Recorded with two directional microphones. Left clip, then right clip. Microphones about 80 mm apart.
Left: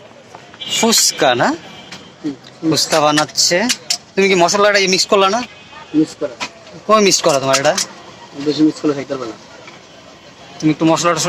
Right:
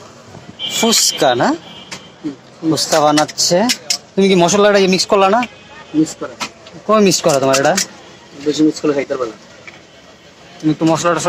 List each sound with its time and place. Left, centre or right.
0.7 s speech: centre
2.6 s speech: right
3.8 s a sound: right
4.6 s speech: right
10.6 s speech: right